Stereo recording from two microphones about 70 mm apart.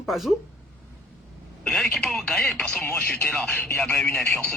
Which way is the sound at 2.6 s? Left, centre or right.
Centre.